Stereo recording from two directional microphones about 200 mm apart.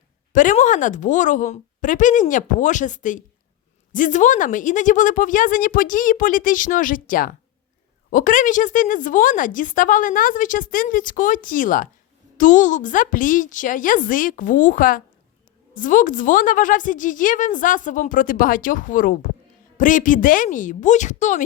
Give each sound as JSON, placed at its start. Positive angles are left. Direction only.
{"t": 0.3, "sound": "speech", "side_deg": 40}